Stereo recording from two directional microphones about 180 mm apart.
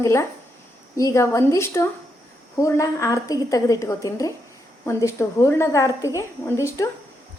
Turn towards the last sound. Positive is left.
turn(degrees=15)  # may be behind; listen again after turning